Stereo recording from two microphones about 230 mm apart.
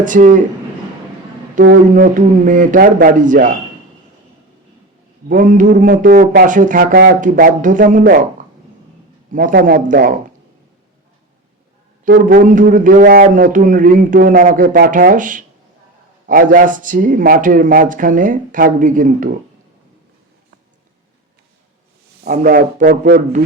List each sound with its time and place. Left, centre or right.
0.0 s a man's voice: right
1.6 s a man's voice: right
5.3 s a man's voice: right
9.3 s a man's voice: right
12.0 s a man's voice: right
22.2 s a man's voice: right